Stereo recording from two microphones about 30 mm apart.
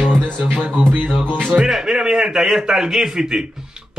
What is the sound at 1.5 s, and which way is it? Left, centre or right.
A man's voice, centre.